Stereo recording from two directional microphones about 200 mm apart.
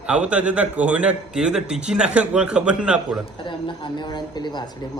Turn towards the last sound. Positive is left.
turn(degrees=20)  # may be behind; listen again after turning